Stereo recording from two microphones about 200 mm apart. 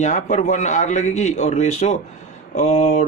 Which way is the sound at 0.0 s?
35° left (ahead or behind).